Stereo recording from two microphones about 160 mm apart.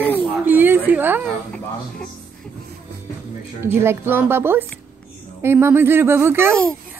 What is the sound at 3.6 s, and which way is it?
Speech, 15° right (ahead or behind).